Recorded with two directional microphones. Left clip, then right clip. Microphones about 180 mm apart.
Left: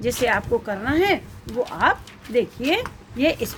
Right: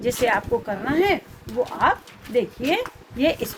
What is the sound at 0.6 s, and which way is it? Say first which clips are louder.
Speech: even; 30° left (ahead or behind).